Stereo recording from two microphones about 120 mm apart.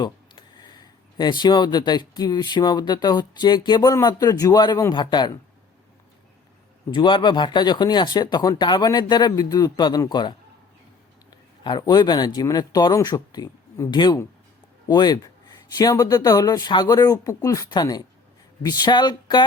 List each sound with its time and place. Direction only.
0.0 s speech: 35° left (ahead or behind)
6.9 s speech: 40° left (ahead or behind)